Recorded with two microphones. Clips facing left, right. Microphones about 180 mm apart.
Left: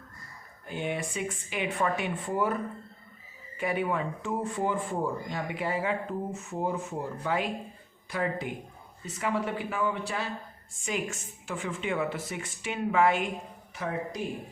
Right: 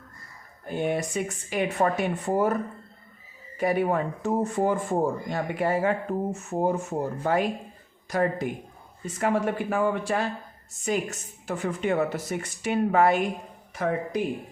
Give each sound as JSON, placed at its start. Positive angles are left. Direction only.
{"t": 0.7, "sound": "speech", "side_deg": -40}
{"t": 3.6, "sound": "a woman's voice", "side_deg": -40}
{"t": 13.7, "sound": "speech", "side_deg": -55}